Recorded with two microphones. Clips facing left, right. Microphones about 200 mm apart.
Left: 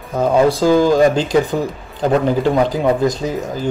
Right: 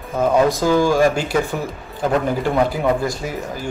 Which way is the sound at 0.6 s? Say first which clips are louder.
Left 3 dB; 15° left (ahead or behind).